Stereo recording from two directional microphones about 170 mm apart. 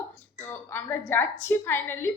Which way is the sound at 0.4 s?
15° left (ahead or behind).